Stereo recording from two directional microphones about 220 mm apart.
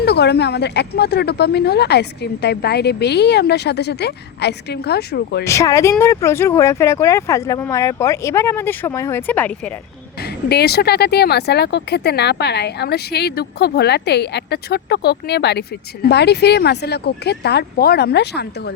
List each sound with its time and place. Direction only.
0.0 s speech: 50° left (ahead or behind)
5.5 s speech: 15° left (ahead or behind)
10.5 s speech: 45° left (ahead or behind)